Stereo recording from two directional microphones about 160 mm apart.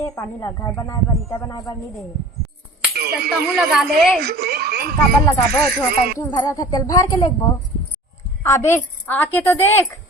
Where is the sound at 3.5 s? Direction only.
Centre (ahead or behind).